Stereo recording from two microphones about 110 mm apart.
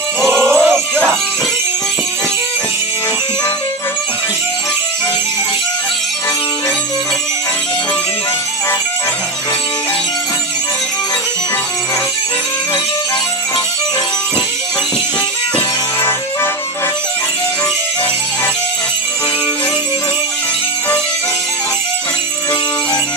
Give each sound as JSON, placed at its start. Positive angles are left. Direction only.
{"t": 0.2, "sound": "music", "side_deg": 5}
{"t": 15.5, "sound": "music", "side_deg": 20}